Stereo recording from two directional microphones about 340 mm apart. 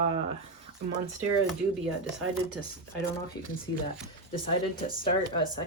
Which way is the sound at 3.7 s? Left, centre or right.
Left.